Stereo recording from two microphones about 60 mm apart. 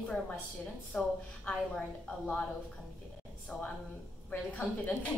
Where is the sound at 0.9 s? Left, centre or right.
Left.